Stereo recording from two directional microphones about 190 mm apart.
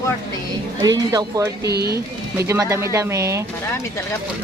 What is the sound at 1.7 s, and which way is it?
Speech, 55° right (ahead or behind).